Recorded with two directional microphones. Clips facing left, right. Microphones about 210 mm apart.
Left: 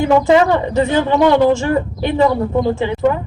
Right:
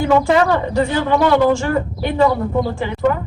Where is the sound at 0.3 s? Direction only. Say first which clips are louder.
Left 3 dB; 20° left (ahead or behind).